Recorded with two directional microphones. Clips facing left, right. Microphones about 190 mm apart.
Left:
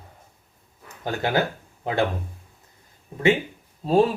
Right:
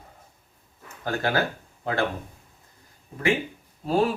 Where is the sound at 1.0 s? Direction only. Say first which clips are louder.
Left 2 dB; 20° left (ahead or behind).